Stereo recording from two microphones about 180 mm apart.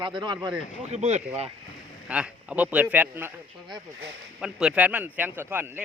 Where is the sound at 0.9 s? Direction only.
40° right (ahead or behind).